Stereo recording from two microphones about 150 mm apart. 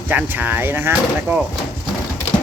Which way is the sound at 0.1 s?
10° right (ahead or behind).